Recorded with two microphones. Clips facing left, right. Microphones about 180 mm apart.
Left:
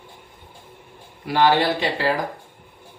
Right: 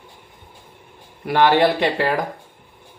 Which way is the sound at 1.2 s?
60° right (ahead or behind).